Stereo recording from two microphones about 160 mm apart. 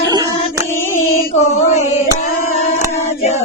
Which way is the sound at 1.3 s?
45° left (ahead or behind).